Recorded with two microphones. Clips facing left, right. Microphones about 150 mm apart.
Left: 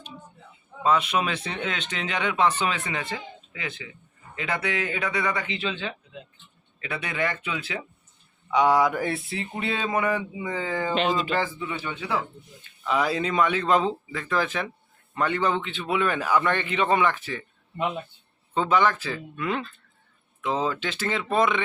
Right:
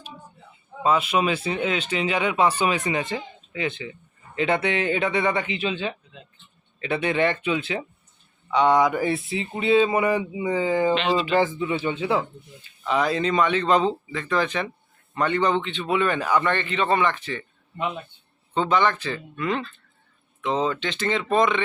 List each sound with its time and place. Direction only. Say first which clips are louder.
0.8 s speech: right 2 dB; 5° right (ahead or behind); by 7.9 s 25° right (ahead or behind)
8.4 s a sound: right 2 dB; 10° left (ahead or behind); by 10.9 s 15° right (ahead or behind)
10.9 s speech: right 2 dB; 45° left (ahead or behind)
11.3 s speech: right 6 dB; 25° right (ahead or behind)
12.8 s a sound: right 2 dB; 5° left (ahead or behind)
15.1 s a man's voice: right 3 dB; 5° left (ahead or behind)
18.5 s a man's voice: right 1 dB; 5° left (ahead or behind)